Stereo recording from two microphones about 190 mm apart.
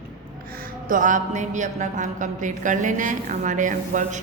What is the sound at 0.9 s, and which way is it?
A woman's voice, 45° right (ahead or behind).